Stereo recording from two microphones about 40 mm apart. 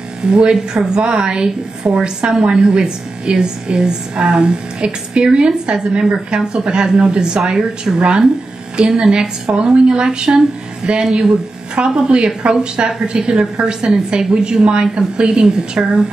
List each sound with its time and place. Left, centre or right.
0.2 s a woman's voice: right